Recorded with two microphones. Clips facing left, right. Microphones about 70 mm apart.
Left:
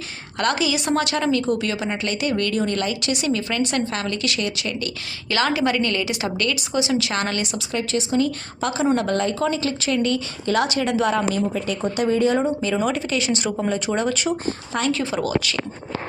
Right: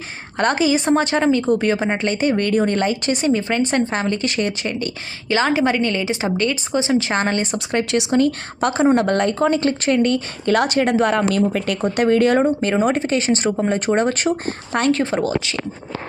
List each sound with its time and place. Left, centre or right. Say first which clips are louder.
0.3 s a woman's voice: right 4 dB; right
1.5 s a woman's voice: right 6 dB; right
5.3 s a woman's voice: right 3 dB; centre
7.7 s a woman's voice: right 5 dB; right